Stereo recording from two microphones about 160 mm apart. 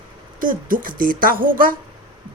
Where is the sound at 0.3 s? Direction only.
60° right (ahead or behind).